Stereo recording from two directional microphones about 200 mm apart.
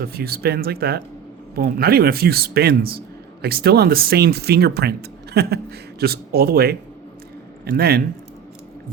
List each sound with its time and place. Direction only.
0.0 s speech: 50° right (ahead or behind)